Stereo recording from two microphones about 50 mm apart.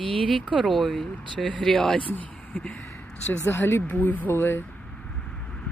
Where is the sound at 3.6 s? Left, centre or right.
Left.